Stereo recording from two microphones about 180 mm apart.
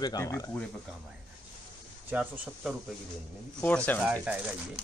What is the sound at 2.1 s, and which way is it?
Speech, 5° right (ahead or behind).